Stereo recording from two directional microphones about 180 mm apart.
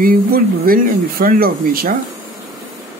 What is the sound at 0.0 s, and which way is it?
Speech, 55° right (ahead or behind).